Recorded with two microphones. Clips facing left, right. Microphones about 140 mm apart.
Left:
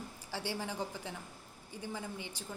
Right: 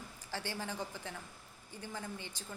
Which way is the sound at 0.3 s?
15° left (ahead or behind).